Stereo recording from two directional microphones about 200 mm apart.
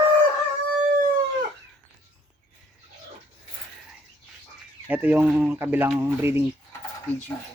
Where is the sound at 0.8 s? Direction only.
35° right (ahead or behind).